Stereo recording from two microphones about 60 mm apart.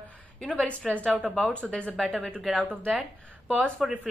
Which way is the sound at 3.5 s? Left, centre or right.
Centre.